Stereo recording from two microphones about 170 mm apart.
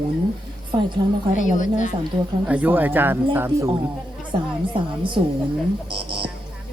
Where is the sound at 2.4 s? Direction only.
10° right (ahead or behind).